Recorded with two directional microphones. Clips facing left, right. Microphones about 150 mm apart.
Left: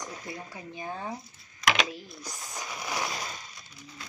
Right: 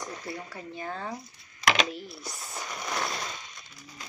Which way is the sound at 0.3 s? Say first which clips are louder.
Right 2 dB; 15° left (ahead or behind).